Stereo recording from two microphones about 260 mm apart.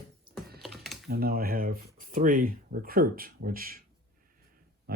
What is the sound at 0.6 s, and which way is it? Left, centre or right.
Computer keyboard, centre.